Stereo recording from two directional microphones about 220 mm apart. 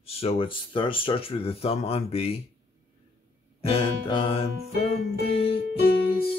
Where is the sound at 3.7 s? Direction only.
25° left (ahead or behind).